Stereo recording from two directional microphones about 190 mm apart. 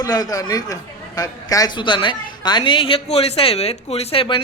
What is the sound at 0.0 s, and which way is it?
A man's voice, 20° left (ahead or behind).